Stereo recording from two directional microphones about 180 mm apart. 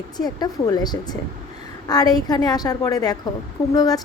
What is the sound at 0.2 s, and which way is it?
A woman's voice, 20° left (ahead or behind).